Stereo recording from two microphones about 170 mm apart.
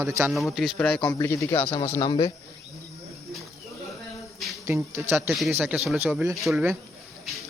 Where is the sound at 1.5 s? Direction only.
30° left (ahead or behind).